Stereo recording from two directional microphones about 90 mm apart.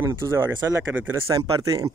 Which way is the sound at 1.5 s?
40° right (ahead or behind).